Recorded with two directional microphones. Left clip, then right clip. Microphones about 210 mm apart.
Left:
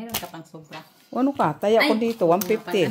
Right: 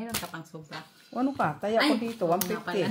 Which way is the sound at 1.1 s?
45° left (ahead or behind).